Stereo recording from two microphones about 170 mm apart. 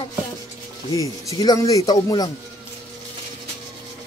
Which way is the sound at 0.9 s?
20° left (ahead or behind).